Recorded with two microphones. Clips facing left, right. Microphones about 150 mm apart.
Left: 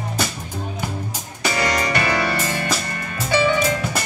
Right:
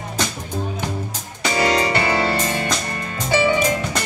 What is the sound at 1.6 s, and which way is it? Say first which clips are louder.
Music: right 3 dB; 20° right (ahead or behind).